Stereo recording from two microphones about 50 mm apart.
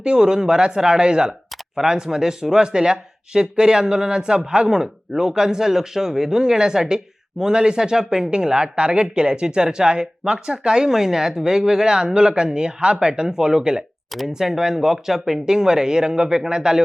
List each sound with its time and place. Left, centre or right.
0.0 s speech: centre